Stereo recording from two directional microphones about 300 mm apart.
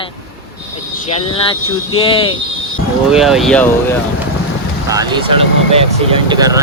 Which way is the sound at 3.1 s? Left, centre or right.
Centre.